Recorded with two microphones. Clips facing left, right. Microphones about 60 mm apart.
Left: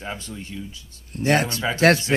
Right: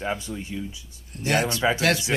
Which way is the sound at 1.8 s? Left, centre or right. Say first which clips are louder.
Left 6 dB; left.